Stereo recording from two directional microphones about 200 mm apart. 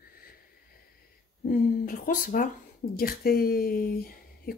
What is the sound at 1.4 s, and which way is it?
A woman's voice, 40° left (ahead or behind).